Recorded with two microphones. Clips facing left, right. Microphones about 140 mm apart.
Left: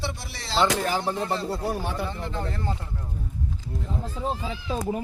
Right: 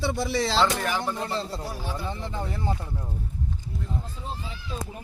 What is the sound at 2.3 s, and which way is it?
Speech, 10° right (ahead or behind).